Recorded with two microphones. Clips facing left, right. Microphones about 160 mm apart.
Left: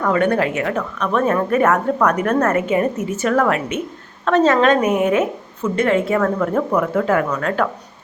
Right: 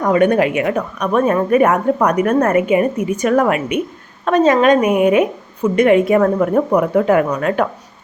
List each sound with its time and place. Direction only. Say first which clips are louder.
0.0 s a woman's voice: right 4 dB; 15° right (ahead or behind)